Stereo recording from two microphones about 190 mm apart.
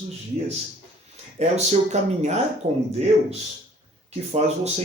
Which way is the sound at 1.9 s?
35° right (ahead or behind).